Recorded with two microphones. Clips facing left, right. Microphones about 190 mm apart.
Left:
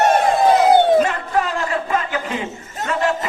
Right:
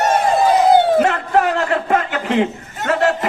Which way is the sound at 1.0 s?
65° right (ahead or behind).